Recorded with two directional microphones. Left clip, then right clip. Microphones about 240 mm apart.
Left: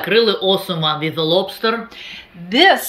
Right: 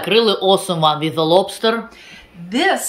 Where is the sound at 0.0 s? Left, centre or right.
Centre.